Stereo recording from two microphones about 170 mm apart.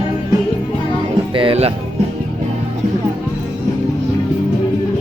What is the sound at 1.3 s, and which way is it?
Speech, 30° right (ahead or behind).